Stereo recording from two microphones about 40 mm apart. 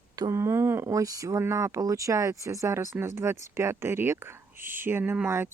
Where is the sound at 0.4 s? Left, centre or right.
Right.